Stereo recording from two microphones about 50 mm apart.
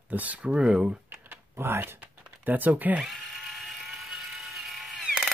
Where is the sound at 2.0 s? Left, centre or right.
Right.